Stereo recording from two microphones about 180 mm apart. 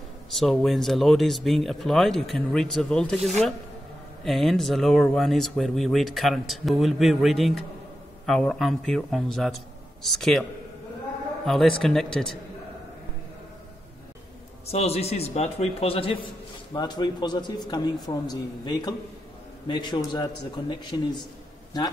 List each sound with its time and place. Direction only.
0.3 s speech: centre (ahead or behind)
11.4 s speech: centre (ahead or behind)
14.7 s a man's voice: 35° left (ahead or behind)